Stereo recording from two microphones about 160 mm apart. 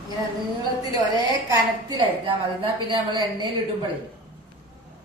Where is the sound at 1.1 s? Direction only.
25° right (ahead or behind).